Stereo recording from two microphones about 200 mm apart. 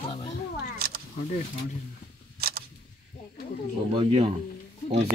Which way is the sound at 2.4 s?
50° right (ahead or behind).